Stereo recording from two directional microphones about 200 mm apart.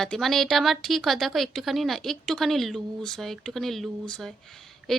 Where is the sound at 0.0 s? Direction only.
Centre (ahead or behind).